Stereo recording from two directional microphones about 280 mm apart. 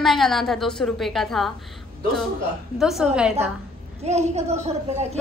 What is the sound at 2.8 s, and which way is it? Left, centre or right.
Speech, centre.